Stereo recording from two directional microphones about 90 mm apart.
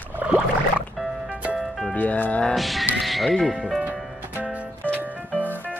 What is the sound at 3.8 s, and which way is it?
Music, 20° right (ahead or behind).